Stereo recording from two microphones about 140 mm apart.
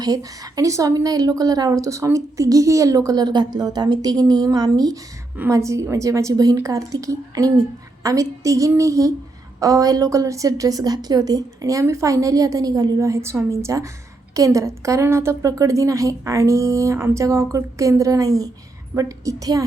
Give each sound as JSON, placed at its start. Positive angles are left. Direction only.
{"t": 0.0, "sound": "a woman's voice", "side_deg": -25}